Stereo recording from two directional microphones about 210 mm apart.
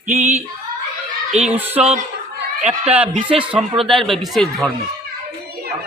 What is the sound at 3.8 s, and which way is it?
Speech, centre (ahead or behind).